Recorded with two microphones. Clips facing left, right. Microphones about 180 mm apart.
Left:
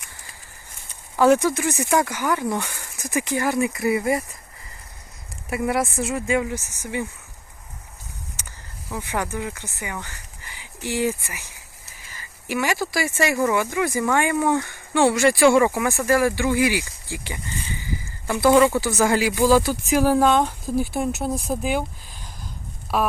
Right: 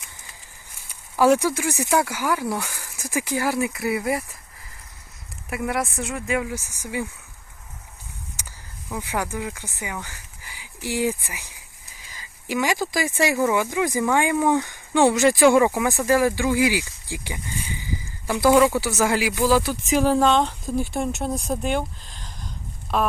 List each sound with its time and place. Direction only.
0.9 s a sound: 10° right (ahead or behind)
1.4 s speech: 10° right (ahead or behind)
5.5 s speech: centre (ahead or behind)
9.0 s speech: 10° right (ahead or behind); by 23.1 s 5° left (ahead or behind)